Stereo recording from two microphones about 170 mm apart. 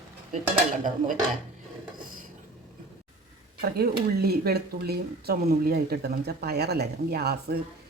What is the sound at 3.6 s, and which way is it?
Speech, 65° right (ahead or behind).